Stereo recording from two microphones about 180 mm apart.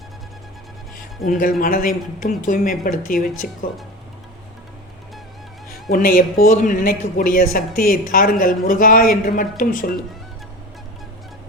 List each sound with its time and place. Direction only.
1.3 s a woman's voice: 50° left (ahead or behind)
5.7 s a woman's voice: 55° left (ahead or behind)